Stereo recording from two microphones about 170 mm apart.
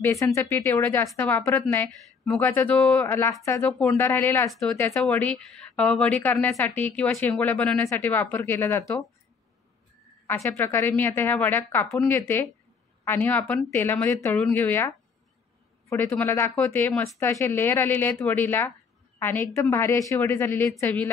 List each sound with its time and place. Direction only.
0.0 s a woman's voice: 15° left (ahead or behind)
10.2 s a woman's voice: 15° left (ahead or behind)
15.9 s speech: 15° left (ahead or behind)